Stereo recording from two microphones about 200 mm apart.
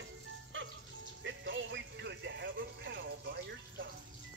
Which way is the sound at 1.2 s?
65° right (ahead or behind).